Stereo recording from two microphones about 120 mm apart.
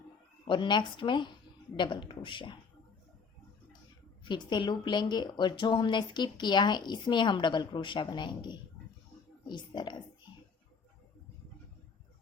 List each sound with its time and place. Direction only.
0.4 s speech: 40° left (ahead or behind)
4.2 s speech: 40° left (ahead or behind)